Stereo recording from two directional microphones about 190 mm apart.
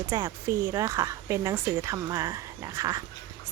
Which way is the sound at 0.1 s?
15° right (ahead or behind).